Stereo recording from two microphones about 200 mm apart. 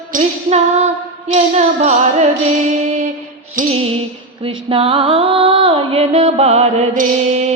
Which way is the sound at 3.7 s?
30° right (ahead or behind).